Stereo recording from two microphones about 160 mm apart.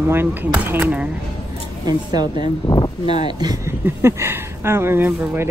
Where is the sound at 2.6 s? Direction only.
25° left (ahead or behind).